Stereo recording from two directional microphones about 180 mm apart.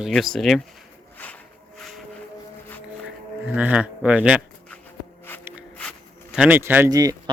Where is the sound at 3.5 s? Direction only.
5° right (ahead or behind).